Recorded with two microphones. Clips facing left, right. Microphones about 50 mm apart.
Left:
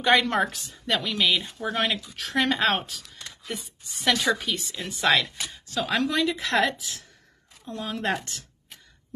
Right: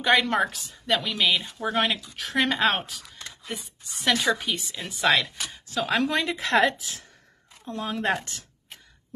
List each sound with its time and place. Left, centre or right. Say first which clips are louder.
0.0 s speech: even; centre
5.2 s speech: even; centre
6.0 s a woman's voice: left 1 dB; right
6.3 s speech: right 2 dB; centre